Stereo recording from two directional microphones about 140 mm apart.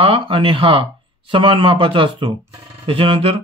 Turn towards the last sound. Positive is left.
turn(degrees=-40)  # may be behind; listen again after turning